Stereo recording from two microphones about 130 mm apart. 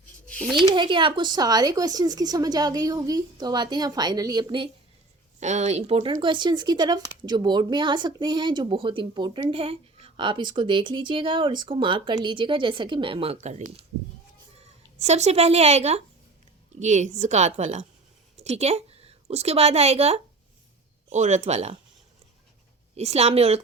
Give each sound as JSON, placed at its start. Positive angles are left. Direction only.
{"t": 0.3, "sound": "a sound", "side_deg": 5}
{"t": 0.8, "sound": "speech", "side_deg": -40}
{"t": 5.4, "sound": "a woman's voice", "side_deg": -65}
{"t": 14.9, "sound": "a woman's voice", "side_deg": -60}
{"t": 21.1, "sound": "a woman's voice", "side_deg": -65}
{"t": 23.0, "sound": "a woman's voice", "side_deg": -55}